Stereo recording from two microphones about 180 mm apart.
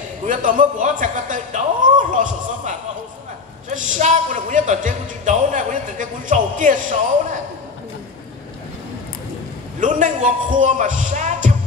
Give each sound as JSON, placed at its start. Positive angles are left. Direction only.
{"t": 0.3, "sound": "speech", "side_deg": -45}
{"t": 9.8, "sound": "speech", "side_deg": -45}